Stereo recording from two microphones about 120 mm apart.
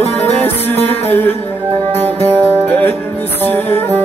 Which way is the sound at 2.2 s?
20° left (ahead or behind).